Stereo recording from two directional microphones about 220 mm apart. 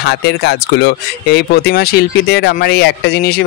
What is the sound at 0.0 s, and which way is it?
Speech, 50° left (ahead or behind).